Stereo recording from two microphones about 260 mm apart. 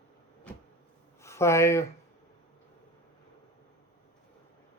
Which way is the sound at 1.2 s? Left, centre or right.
Centre.